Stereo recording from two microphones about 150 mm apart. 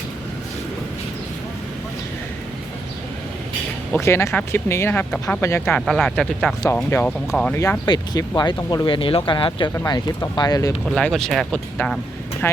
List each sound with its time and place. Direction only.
3.9 s speech: 20° left (ahead or behind)
5.8 s speech: 5° left (ahead or behind)
6.9 s speech: 15° left (ahead or behind)
7.9 s speech: 25° left (ahead or behind)
10.8 s speech: centre (ahead or behind)